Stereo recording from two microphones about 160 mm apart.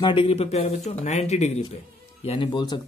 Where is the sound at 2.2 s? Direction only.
30° left (ahead or behind).